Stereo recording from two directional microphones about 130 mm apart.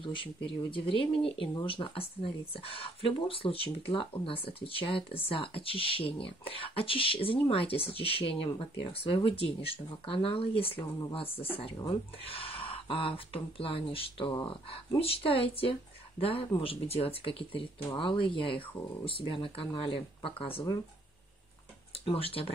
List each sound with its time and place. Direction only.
0.0 s speech: 40° left (ahead or behind)
22.0 s speech: 45° left (ahead or behind)